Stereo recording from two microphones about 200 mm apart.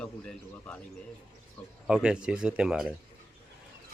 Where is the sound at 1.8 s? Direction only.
5° right (ahead or behind).